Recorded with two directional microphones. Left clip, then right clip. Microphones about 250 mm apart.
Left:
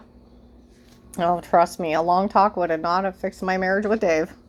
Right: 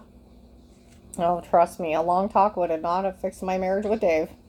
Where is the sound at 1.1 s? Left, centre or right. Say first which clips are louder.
Left 2 dB; left.